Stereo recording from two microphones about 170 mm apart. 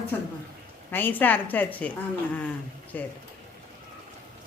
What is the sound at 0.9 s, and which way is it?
Speech, 10° left (ahead or behind).